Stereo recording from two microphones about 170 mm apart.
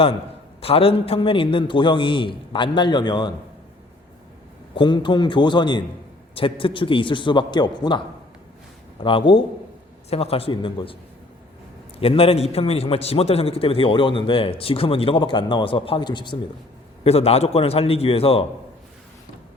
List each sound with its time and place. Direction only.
0.6 s a man's voice: 35° left (ahead or behind)
4.7 s a man's voice: 30° left (ahead or behind)
11.9 s a man's voice: 35° left (ahead or behind)